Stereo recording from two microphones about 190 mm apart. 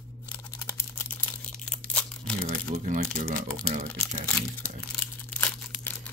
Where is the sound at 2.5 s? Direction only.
45° right (ahead or behind).